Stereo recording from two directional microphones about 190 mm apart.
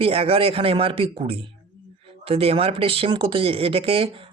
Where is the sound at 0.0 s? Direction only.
30° right (ahead or behind).